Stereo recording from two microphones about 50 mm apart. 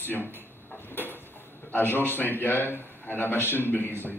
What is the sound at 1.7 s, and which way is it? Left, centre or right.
A man's voice, left.